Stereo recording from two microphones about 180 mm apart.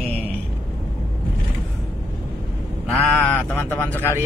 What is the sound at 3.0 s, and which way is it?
Speech, 5° left (ahead or behind).